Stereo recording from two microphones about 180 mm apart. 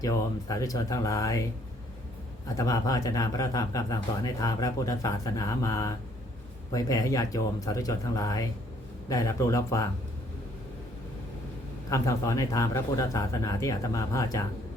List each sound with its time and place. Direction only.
0.0 s speech: 20° left (ahead or behind)
2.6 s speech: 20° left (ahead or behind)
11.9 s speech: 15° left (ahead or behind)